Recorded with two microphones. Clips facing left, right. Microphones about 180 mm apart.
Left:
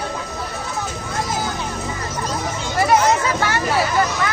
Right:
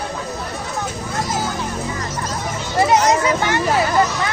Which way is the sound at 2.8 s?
20° right (ahead or behind).